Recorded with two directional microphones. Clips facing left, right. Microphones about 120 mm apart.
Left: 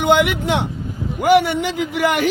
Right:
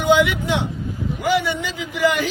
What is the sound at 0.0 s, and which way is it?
Speech, 65° left (ahead or behind).